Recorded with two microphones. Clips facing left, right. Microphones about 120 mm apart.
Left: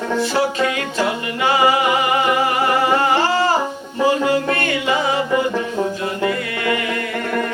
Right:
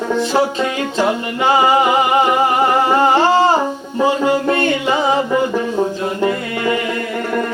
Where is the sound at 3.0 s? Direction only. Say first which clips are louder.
Right 5 dB; 25° right (ahead or behind).